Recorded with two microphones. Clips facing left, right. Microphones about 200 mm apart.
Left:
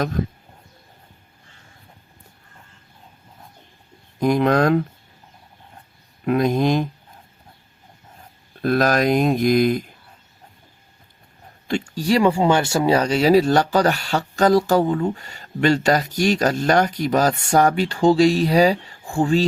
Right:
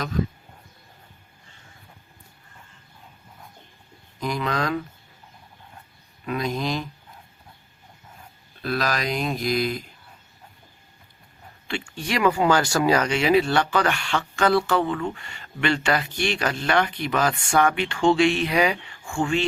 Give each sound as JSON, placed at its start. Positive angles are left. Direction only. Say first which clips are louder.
{"t": 4.2, "sound": "speech", "louder": "left 9 dB", "side_deg": 50}
{"t": 6.2, "sound": "speech", "louder": "left 8 dB", "side_deg": 50}
{"t": 8.6, "sound": "speech", "louder": "left 8 dB", "side_deg": 50}
{"t": 11.7, "sound": "speech", "louder": "left 8 dB", "side_deg": 40}